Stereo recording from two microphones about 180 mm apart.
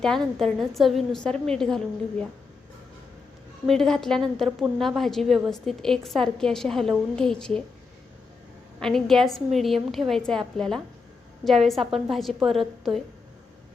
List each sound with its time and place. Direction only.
0.0 s a woman's voice: 5° left (ahead or behind)
3.7 s a woman's voice: centre (ahead or behind)
8.8 s a woman's voice: centre (ahead or behind)